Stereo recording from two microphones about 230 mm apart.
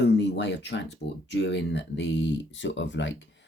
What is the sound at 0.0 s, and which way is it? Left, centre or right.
Speech, left.